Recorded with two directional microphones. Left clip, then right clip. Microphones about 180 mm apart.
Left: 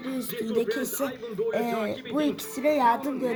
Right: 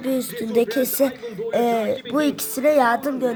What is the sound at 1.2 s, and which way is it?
Speech, 45° right (ahead or behind).